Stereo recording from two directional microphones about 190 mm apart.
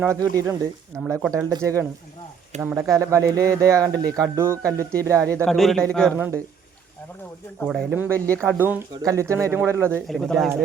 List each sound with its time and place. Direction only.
0.0 s speech: 15° right (ahead or behind)
3.0 s speech: 15° right (ahead or behind)
5.5 s a man's voice: centre (ahead or behind)
6.1 s speech: 10° right (ahead or behind)
7.7 s speech: 5° right (ahead or behind)
8.1 s speech: 5° left (ahead or behind)
8.4 s speech: 10° right (ahead or behind)
10.1 s a man's voice: centre (ahead or behind)